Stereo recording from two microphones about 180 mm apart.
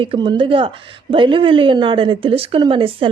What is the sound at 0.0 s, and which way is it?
Speech, 25° right (ahead or behind).